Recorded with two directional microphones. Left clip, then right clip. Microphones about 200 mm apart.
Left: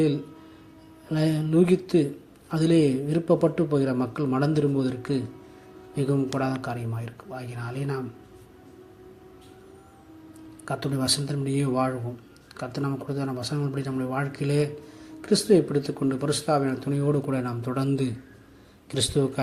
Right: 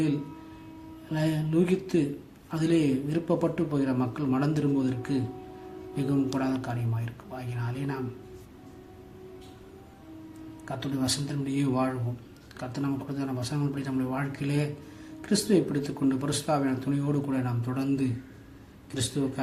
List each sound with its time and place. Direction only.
1.1 s speech: 25° left (ahead or behind)
6.4 s speech: 25° left (ahead or behind)
10.7 s a man's voice: 30° left (ahead or behind)